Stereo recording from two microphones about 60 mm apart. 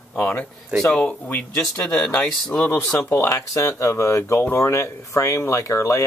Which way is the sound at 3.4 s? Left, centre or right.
Left.